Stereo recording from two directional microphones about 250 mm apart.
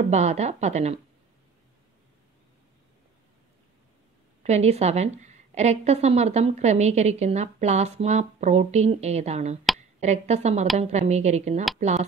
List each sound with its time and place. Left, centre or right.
0.1 s a woman's voice: right
4.4 s a woman's voice: right